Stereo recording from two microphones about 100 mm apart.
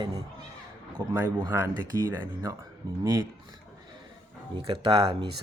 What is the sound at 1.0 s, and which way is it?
Speech, 35° right (ahead or behind).